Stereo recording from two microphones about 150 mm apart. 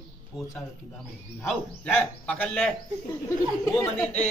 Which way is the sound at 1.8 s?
10° left (ahead or behind).